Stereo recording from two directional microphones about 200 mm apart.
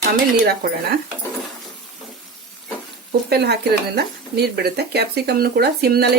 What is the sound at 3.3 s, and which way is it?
Speech, 55° right (ahead or behind).